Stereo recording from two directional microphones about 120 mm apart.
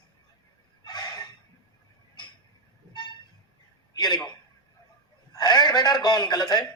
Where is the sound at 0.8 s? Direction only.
35° left (ahead or behind).